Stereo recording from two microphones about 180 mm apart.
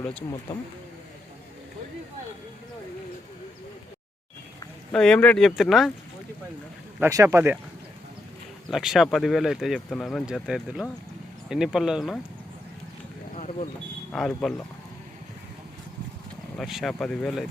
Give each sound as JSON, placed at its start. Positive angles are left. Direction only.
{"t": 0.0, "sound": "speech", "side_deg": 10}
{"t": 0.5, "sound": "speech", "side_deg": 25}
{"t": 4.9, "sound": "speech", "side_deg": 5}
{"t": 7.0, "sound": "speech", "side_deg": -15}
{"t": 8.7, "sound": "speech", "side_deg": 0}
{"t": 13.3, "sound": "vehicle", "side_deg": 40}
{"t": 14.1, "sound": "speech", "side_deg": 5}
{"t": 16.6, "sound": "speech", "side_deg": 0}